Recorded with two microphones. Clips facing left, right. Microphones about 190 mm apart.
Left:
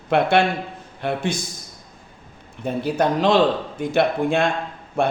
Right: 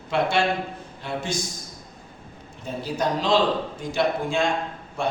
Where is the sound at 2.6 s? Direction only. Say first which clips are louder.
Left 6 dB; 60° left (ahead or behind).